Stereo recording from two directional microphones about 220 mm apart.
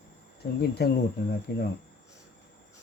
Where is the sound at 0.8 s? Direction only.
45° left (ahead or behind).